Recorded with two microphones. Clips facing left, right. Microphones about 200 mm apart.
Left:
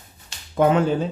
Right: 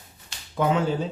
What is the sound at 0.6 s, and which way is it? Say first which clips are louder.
Speech: left 5 dB; 55° left (ahead or behind).